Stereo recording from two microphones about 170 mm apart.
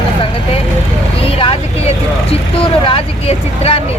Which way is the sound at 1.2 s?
35° left (ahead or behind).